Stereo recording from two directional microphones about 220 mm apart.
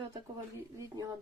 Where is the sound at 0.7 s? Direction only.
15° right (ahead or behind).